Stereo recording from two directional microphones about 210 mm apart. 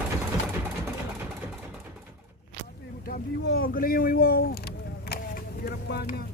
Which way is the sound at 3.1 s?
45° left (ahead or behind).